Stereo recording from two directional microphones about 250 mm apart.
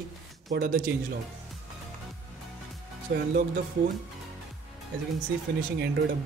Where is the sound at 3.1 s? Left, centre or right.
Right.